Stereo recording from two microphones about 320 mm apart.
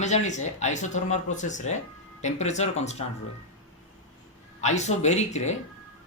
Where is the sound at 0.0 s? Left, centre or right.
Left.